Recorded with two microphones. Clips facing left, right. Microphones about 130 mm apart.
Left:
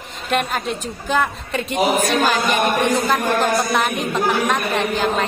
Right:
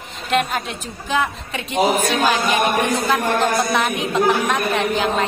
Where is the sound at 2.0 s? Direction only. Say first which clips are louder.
Left 1 dB; centre (ahead or behind).